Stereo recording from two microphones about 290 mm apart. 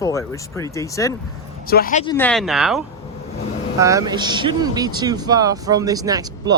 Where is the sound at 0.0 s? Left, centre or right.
Centre.